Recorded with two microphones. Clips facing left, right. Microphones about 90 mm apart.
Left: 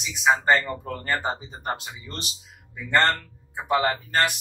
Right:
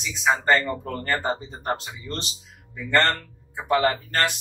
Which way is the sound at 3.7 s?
15° left (ahead or behind).